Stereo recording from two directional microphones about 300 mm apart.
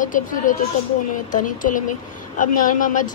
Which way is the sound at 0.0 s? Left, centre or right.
Left.